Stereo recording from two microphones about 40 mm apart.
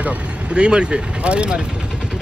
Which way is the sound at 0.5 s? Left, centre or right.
Right.